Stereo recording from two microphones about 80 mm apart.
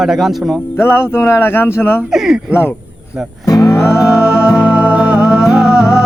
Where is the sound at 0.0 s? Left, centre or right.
Centre.